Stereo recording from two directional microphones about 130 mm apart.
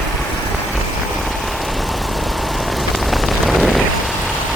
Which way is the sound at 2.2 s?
Centre (ahead or behind).